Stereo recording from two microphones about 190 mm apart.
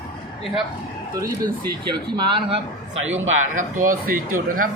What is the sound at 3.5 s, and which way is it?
Speech, 45° right (ahead or behind).